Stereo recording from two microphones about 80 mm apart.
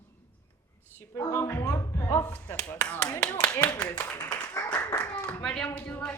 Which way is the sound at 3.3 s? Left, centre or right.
Left.